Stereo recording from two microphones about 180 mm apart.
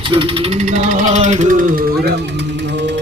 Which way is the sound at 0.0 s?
30° right (ahead or behind).